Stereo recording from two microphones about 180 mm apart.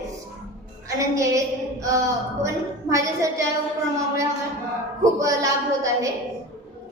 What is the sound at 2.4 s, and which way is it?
A woman's voice, 15° right (ahead or behind).